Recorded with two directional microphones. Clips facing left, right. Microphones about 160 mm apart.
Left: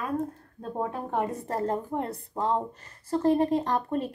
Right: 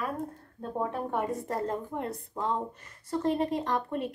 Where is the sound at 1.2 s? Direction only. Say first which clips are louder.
Left 4 dB; 35° left (ahead or behind).